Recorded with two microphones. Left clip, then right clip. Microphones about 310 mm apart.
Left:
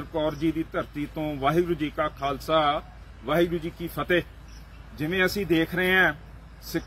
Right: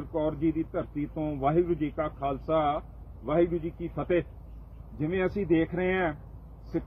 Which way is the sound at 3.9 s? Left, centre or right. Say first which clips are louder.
Left 4 dB; centre.